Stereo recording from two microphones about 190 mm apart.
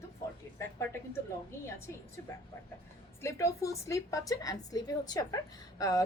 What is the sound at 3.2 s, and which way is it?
A woman's voice, 15° left (ahead or behind).